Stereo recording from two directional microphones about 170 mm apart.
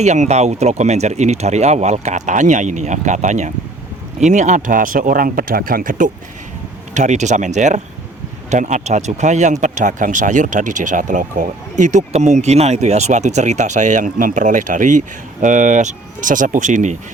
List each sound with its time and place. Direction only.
0.0 s speech: 40° right (ahead or behind)